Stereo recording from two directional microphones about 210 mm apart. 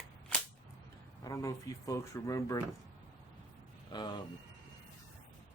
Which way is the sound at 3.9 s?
20° left (ahead or behind).